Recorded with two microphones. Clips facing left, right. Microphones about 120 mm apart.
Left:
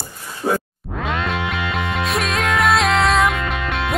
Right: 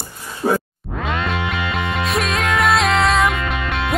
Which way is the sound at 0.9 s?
Centre (ahead or behind).